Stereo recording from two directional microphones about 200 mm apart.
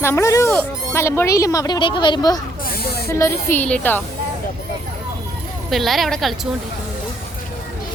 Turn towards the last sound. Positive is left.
turn(degrees=0)  # may be behind; listen again after turning